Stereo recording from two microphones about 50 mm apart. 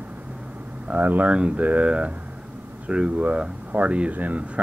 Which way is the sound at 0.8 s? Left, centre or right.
Right.